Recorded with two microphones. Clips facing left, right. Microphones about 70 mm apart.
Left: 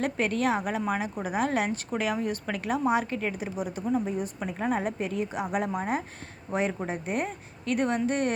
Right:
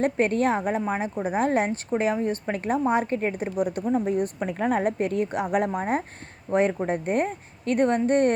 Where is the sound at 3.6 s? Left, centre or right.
Right.